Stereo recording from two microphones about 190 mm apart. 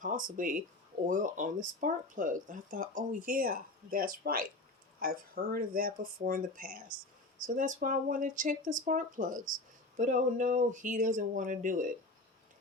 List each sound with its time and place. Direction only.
0.0 s speech: 45° right (ahead or behind)